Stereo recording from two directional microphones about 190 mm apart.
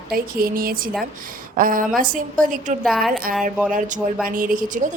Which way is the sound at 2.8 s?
Centre (ahead or behind).